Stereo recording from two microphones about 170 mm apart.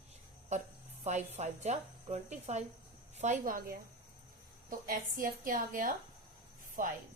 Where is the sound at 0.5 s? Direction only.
45° right (ahead or behind).